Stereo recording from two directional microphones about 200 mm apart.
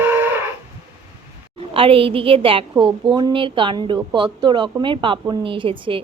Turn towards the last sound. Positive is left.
turn(degrees=-25)  # may be behind; listen again after turning